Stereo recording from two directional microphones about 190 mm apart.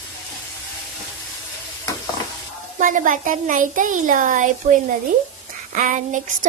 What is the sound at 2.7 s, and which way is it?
A woman's voice, 45° right (ahead or behind).